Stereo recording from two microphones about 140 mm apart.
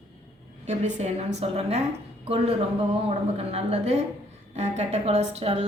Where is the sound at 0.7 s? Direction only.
55° right (ahead or behind).